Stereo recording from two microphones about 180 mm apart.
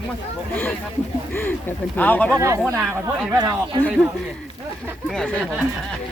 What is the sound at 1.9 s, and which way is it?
Speech, 10° left (ahead or behind).